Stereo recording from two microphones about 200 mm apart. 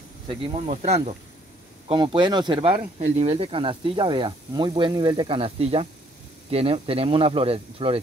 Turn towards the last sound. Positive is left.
turn(degrees=-30)  # may be behind; listen again after turning